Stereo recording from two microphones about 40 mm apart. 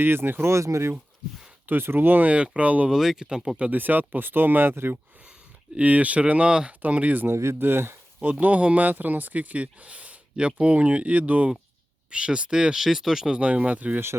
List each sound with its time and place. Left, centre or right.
0.0 s speech: right
1.6 s speech: right
2.2 s speech: right
2.9 s speech: centre
3.7 s speech: right
4.7 s speech: right
5.8 s speech: right
6.5 s speech: right
6.8 s speech: right
7.3 s speech: right
8.2 s speech: right
12.1 s speech: right
12.8 s speech: centre
13.3 s speech: right